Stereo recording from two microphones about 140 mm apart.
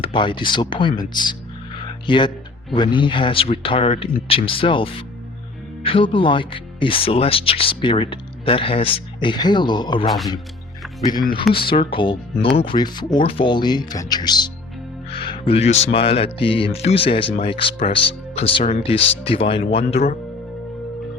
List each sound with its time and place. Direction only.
0.0 s speech: 35° left (ahead or behind)
1.8 s music: 35° left (ahead or behind)
2.7 s speech: 35° left (ahead or behind)
11.5 s speech: 40° left (ahead or behind)